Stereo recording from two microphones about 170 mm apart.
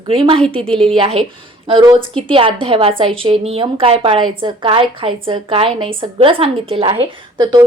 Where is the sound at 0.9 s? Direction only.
30° right (ahead or behind).